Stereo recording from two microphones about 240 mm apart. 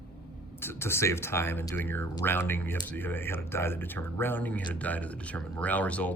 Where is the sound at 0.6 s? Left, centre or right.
Centre.